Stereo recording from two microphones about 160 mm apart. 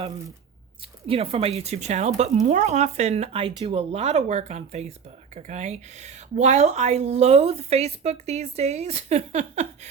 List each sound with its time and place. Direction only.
1.0 s speech: 35° right (ahead or behind)